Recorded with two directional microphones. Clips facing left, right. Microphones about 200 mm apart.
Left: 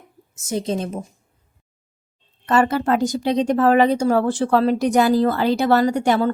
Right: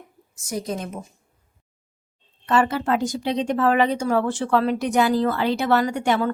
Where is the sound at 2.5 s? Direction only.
40° left (ahead or behind).